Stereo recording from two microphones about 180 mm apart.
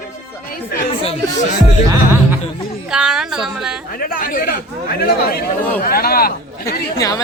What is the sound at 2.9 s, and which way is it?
Speech, 5° right (ahead or behind).